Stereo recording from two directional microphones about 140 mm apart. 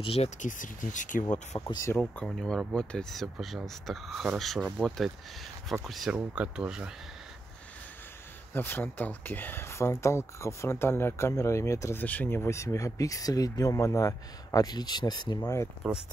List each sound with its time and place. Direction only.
0.0 s speech: 45° left (ahead or behind)
0.4 s speech: 70° left (ahead or behind)
1.5 s speech: 30° left (ahead or behind)
2.0 s speech: 5° left (ahead or behind)
8.5 s speech: 15° left (ahead or behind)